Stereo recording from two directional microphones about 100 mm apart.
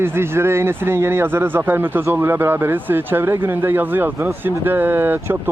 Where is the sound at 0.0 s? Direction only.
25° right (ahead or behind).